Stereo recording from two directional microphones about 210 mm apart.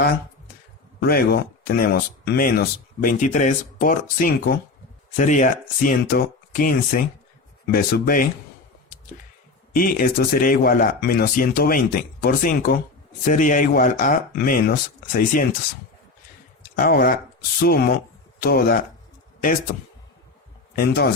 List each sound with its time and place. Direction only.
0.9 s speech: 50° left (ahead or behind)
9.7 s speech: 40° left (ahead or behind)
16.7 s speech: 45° left (ahead or behind)